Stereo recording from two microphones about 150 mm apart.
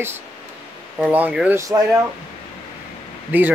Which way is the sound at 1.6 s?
25° right (ahead or behind).